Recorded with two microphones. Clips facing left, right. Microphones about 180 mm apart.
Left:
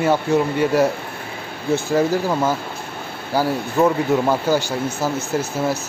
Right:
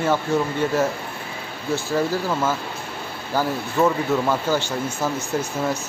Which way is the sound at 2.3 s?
15° left (ahead or behind).